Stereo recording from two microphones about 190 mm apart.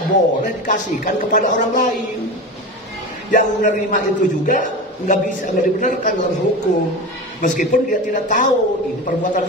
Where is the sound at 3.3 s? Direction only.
45° left (ahead or behind).